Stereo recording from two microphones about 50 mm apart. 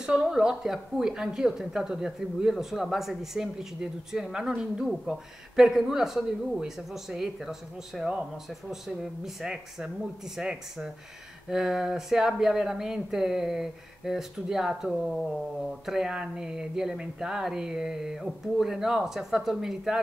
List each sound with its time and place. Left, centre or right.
0.0 s speech: centre